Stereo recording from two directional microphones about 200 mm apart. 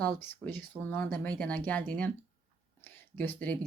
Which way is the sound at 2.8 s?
10° left (ahead or behind).